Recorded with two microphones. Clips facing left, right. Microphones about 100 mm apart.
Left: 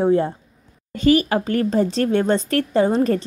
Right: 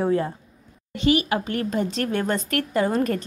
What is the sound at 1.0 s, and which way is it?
Speech, 40° left (ahead or behind).